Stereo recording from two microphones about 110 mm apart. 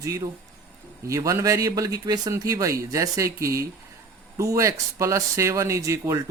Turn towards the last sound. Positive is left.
turn(degrees=-30)  # may be behind; listen again after turning